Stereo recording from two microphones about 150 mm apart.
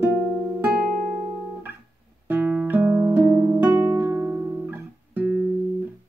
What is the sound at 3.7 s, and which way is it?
Music, 15° right (ahead or behind).